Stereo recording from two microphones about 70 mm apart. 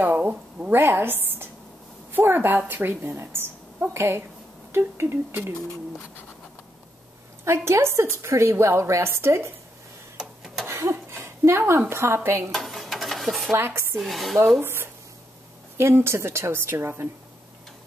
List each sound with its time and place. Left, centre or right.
0.0 s speech: right
0.7 s a woman's voice: right
7.4 s a woman's voice: right
10.7 s a sound: right
11.9 s a woman's voice: right
12.4 s stir: centre
13.5 s a woman's voice: right
13.9 s speech: centre
14.6 s a sound: right
15.8 s a woman's voice: right